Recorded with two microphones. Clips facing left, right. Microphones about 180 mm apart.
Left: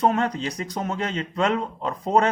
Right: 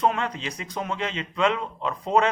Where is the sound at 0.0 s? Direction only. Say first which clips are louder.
Left 3 dB; 40° left (ahead or behind).